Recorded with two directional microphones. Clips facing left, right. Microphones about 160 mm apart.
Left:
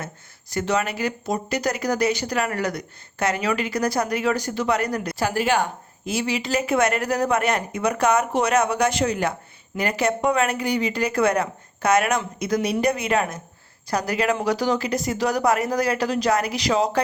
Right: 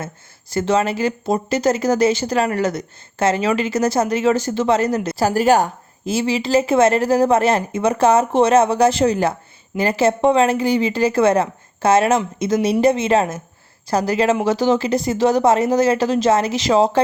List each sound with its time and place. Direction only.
0.5 s speech: 30° right (ahead or behind)